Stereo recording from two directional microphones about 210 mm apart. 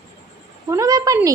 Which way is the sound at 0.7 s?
15° right (ahead or behind).